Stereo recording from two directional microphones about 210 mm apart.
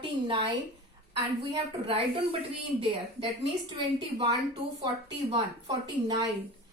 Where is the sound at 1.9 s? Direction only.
30° right (ahead or behind).